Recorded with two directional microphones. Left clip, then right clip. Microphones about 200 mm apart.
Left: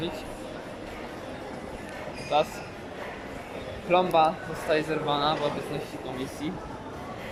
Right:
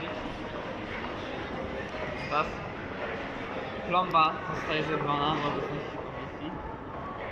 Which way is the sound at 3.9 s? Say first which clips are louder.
Left 3 dB; 25° left (ahead or behind).